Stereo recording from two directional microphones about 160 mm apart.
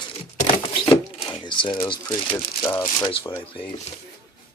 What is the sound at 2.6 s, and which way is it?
Speech, 15° left (ahead or behind).